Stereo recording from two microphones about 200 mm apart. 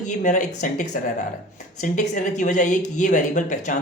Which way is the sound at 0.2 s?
40° left (ahead or behind).